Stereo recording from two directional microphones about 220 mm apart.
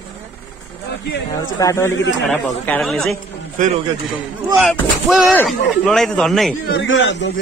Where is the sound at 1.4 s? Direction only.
15° left (ahead or behind).